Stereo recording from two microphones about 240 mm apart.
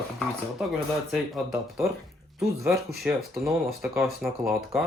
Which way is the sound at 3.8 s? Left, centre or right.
Centre.